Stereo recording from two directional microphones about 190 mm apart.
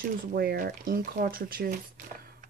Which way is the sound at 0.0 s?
50° right (ahead or behind).